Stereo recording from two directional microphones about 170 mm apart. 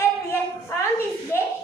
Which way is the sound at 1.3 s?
15° left (ahead or behind).